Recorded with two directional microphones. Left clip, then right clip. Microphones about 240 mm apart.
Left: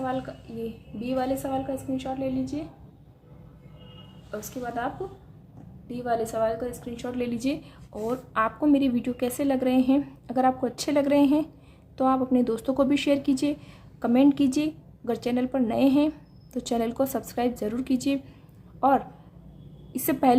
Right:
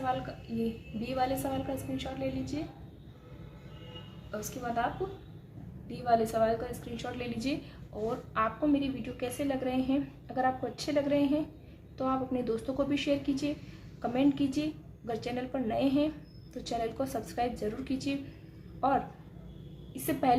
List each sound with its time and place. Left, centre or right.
0.6 s a woman's voice: left
4.3 s a woman's voice: left
5.9 s a woman's voice: left